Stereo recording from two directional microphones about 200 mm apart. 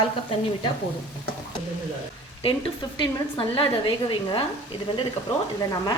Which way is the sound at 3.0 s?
25° left (ahead or behind).